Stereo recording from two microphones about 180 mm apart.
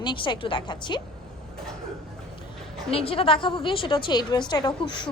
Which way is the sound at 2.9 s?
30° left (ahead or behind).